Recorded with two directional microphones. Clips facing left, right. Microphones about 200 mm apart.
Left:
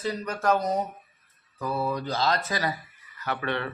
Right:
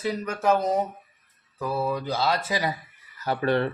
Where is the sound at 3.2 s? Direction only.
35° right (ahead or behind).